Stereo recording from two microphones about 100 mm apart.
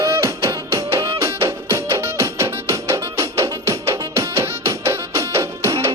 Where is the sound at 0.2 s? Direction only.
30° right (ahead or behind).